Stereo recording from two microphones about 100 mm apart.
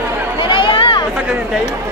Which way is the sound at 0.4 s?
55° left (ahead or behind).